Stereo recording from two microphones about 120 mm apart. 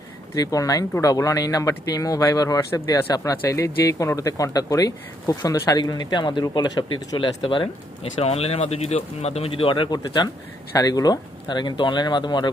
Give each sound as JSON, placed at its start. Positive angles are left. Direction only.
{"t": 0.3, "sound": "speech", "side_deg": 30}
{"t": 8.2, "sound": "speech", "side_deg": 60}